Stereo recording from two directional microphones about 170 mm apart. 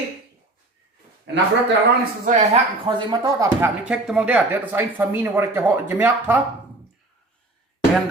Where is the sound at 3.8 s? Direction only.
5° right (ahead or behind).